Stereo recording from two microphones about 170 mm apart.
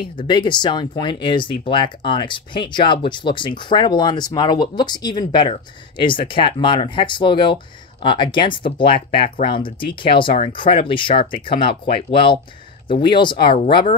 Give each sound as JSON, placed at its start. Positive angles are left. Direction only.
{"t": 0.2, "sound": "speech", "side_deg": 25}